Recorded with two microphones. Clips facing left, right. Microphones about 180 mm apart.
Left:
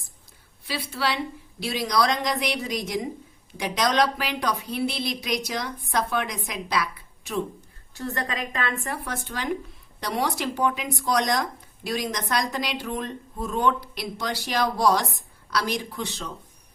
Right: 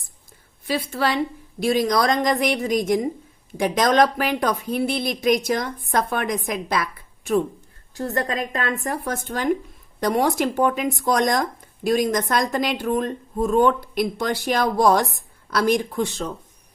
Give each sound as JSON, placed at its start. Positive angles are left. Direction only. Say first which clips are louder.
{"t": 0.6, "sound": "speech", "louder": "right 6 dB", "side_deg": -50}